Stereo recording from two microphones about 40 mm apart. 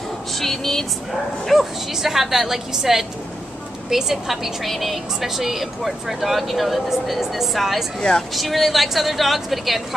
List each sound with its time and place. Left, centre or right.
0.3 s speech: centre
1.4 s a woman's voice: centre